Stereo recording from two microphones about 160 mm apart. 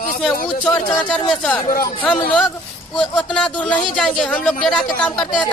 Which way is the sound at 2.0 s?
10° left (ahead or behind).